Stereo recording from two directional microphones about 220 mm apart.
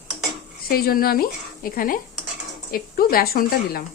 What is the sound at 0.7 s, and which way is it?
A woman's voice, 45° left (ahead or behind).